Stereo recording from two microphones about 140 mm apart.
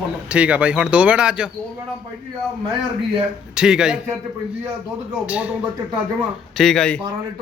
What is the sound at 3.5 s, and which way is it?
Speech, 5° right (ahead or behind).